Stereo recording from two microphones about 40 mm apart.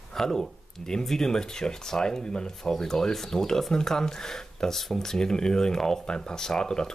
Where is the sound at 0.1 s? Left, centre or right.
Centre.